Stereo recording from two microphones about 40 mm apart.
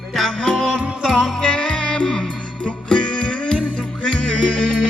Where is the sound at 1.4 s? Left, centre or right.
Left.